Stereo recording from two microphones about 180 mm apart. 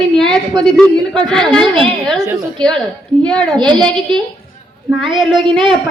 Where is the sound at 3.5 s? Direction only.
25° right (ahead or behind).